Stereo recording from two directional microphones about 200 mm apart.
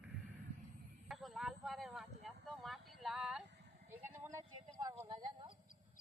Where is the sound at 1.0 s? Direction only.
Centre (ahead or behind).